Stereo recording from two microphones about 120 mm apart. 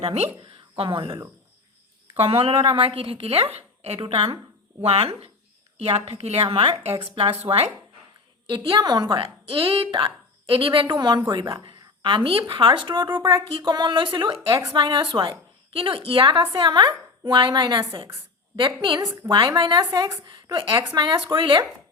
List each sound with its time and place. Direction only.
0.0 s speech: 60° right (ahead or behind)
0.4 s speech: 50° right (ahead or behind)
2.2 s a woman's voice: 55° right (ahead or behind)
18.9 s a woman's voice: 30° right (ahead or behind)
19.3 s speech: 40° right (ahead or behind)